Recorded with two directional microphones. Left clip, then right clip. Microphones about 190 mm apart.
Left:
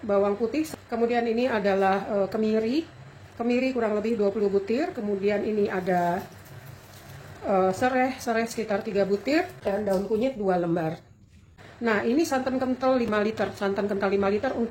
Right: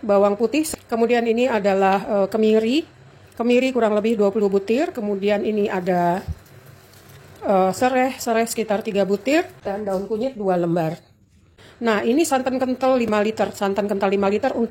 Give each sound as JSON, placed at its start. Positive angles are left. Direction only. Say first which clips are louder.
{"t": 0.0, "sound": "a woman's voice", "louder": "right 7 dB", "side_deg": -50}
{"t": 7.4, "sound": "a woman's voice", "louder": "right 5 dB", "side_deg": -45}
{"t": 10.4, "sound": "a woman's voice", "louder": "right 5 dB", "side_deg": -45}